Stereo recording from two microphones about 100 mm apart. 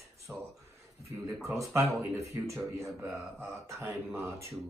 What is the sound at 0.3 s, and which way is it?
Speech, 10° right (ahead or behind).